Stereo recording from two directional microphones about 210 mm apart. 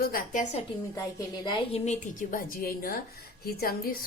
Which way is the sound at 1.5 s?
25° left (ahead or behind).